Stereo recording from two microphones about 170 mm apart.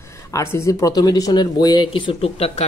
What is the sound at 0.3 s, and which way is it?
Speech, 15° left (ahead or behind).